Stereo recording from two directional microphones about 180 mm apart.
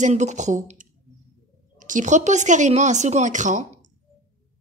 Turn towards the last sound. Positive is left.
turn(degrees=-45)  # may be behind; listen again after turning